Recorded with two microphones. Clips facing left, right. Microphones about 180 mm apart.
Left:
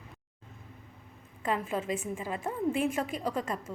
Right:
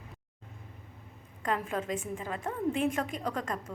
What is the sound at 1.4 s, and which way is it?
A woman's voice, 5° left (ahead or behind).